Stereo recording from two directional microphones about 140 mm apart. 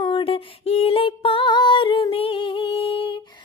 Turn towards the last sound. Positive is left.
turn(degrees=35)  # may be behind; listen again after turning